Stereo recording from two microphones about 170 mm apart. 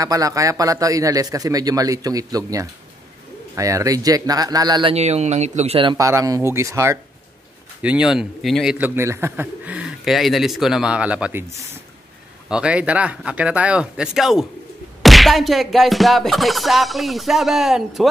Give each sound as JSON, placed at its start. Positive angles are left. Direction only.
{"t": 0.0, "sound": "a man's voice", "side_deg": -20}
{"t": 4.9, "sound": "speech", "side_deg": -40}
{"t": 5.9, "sound": "speech", "side_deg": -20}
{"t": 7.8, "sound": "music", "side_deg": -5}
{"t": 8.7, "sound": "speech", "side_deg": -10}
{"t": 12.4, "sound": "speech", "side_deg": -5}
{"t": 15.0, "sound": "music", "side_deg": 0}